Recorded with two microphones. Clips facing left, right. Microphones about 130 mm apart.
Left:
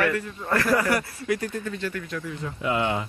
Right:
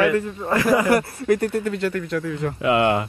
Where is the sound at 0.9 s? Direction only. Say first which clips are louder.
Right 7 dB; 55° right (ahead or behind).